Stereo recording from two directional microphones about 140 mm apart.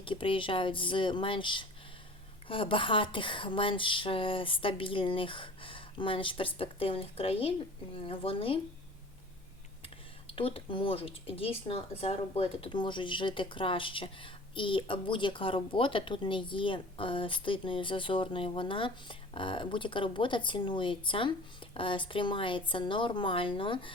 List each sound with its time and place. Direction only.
0.0 s speech: 40° left (ahead or behind)
9.8 s speech: 40° left (ahead or behind)